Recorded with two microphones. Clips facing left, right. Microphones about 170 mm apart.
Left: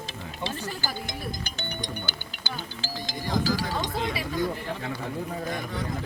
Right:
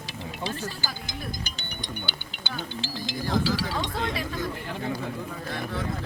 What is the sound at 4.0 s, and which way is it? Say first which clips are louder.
Speech: even; 5° left (ahead or behind).